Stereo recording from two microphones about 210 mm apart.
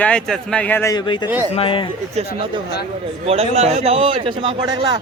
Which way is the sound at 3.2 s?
30° right (ahead or behind).